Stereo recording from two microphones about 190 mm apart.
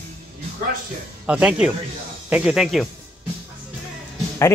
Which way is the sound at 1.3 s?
5° right (ahead or behind).